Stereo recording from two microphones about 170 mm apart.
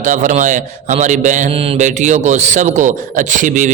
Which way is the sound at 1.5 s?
35° right (ahead or behind).